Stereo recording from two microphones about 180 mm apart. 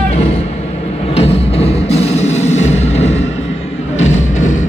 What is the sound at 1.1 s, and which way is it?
Music, 35° left (ahead or behind).